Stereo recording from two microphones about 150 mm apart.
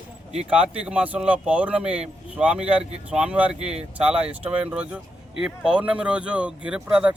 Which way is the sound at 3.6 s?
45° right (ahead or behind).